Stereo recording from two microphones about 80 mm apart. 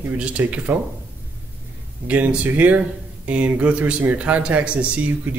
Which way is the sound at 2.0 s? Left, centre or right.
Centre.